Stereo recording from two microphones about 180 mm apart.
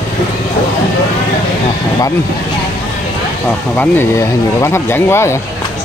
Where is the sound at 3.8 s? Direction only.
15° left (ahead or behind).